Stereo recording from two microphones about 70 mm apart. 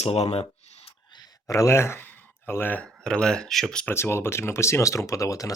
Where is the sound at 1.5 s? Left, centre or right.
Left.